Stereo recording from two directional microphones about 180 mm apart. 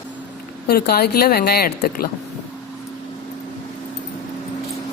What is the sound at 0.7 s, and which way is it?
Speech, 60° left (ahead or behind).